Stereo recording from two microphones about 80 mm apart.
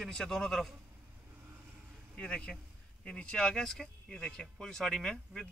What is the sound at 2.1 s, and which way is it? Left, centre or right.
Speech, centre.